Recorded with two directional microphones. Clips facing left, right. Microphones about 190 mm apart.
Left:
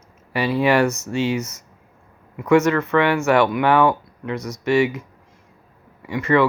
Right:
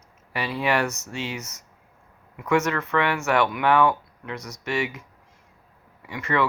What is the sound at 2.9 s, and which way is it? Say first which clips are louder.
Speech: left 5 dB; centre (ahead or behind).